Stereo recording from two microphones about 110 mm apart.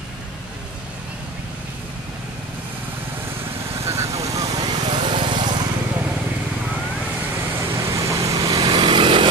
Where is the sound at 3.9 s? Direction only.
30° right (ahead or behind).